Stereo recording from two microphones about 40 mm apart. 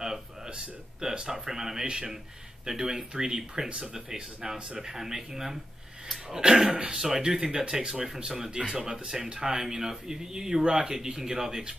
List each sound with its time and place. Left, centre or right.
1.3 s speech: centre